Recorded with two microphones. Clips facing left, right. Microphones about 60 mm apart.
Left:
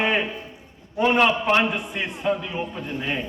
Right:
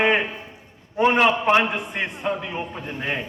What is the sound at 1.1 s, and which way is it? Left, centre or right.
A man's voice, centre.